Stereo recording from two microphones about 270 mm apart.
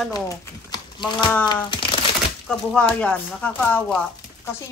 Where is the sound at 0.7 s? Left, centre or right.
Centre.